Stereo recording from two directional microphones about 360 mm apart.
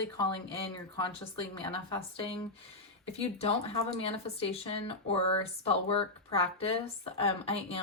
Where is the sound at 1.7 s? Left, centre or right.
Centre.